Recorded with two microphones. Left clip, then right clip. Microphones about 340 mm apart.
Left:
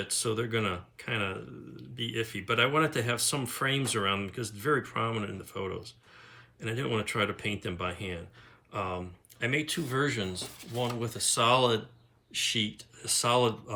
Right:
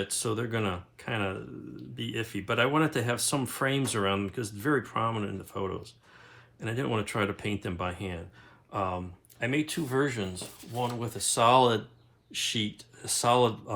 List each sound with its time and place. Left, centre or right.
0.0 s speech: centre